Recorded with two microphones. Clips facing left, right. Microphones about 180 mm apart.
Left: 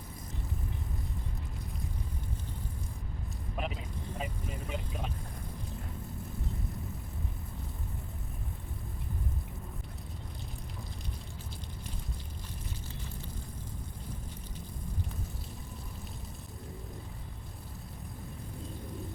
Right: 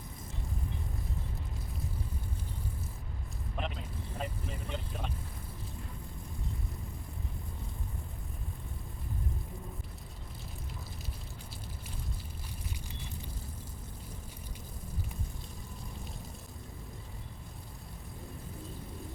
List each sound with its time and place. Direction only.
3.6 s vehicle: 5° left (ahead or behind)
4.2 s speech: 10° left (ahead or behind)